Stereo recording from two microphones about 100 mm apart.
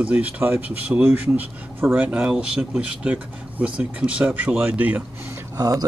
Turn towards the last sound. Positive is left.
turn(degrees=-35)  # may be behind; listen again after turning